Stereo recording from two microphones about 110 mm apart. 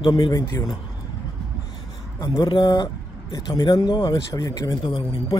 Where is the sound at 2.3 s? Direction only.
45° left (ahead or behind).